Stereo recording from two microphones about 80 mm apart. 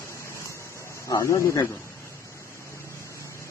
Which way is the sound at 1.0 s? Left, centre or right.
Left.